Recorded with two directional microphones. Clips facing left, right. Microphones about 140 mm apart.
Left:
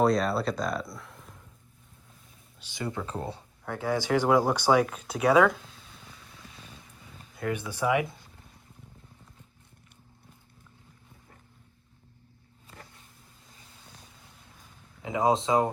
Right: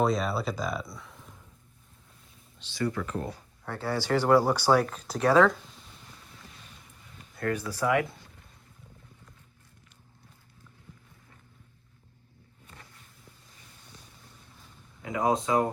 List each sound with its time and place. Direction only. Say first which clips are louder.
0.0 s speech: left 3 dB; centre (ahead or behind)
2.6 s speech: right 4 dB; 20° left (ahead or behind)
3.6 s speech: left 2 dB; 10° left (ahead or behind)
7.6 s speech: even; 20° left (ahead or behind)
15.0 s speech: left 2 dB; 25° left (ahead or behind)